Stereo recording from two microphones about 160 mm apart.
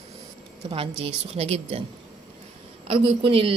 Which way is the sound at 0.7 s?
35° right (ahead or behind).